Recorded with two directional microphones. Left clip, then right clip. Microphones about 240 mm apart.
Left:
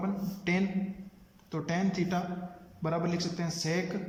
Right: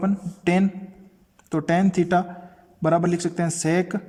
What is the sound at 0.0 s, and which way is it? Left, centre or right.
A man's voice, right.